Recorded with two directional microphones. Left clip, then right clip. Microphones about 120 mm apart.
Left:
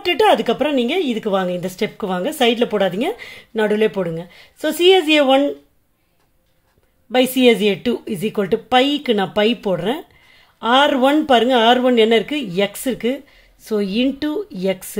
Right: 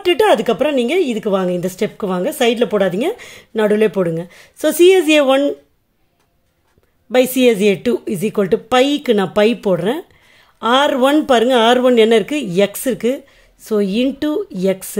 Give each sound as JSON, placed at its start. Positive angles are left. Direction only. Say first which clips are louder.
{"t": 0.0, "sound": "speech", "louder": "right 2 dB", "side_deg": -25}
{"t": 7.1, "sound": "speech", "louder": "right 1 dB", "side_deg": -35}